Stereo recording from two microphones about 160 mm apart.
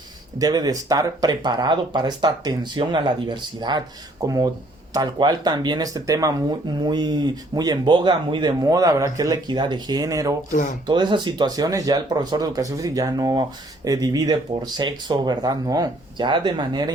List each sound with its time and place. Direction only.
0.3 s speech: 25° right (ahead or behind)